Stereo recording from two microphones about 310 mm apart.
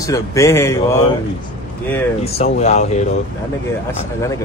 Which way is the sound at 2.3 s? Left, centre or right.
Left.